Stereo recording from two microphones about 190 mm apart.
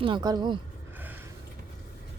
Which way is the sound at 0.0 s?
25° right (ahead or behind).